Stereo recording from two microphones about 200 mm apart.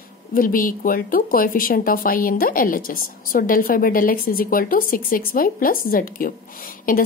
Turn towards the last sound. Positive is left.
turn(degrees=45)  # may be behind; listen again after turning